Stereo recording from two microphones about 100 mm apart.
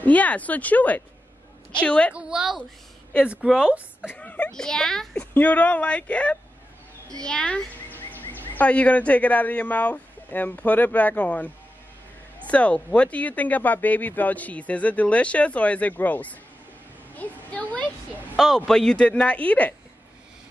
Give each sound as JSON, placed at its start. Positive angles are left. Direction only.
{"t": 0.0, "sound": "speech", "side_deg": 15}
{"t": 2.1, "sound": "speech", "side_deg": -5}
{"t": 4.1, "sound": "speech", "side_deg": 15}
{"t": 7.9, "sound": "a child's voice", "side_deg": 20}
{"t": 18.3, "sound": "speech", "side_deg": 5}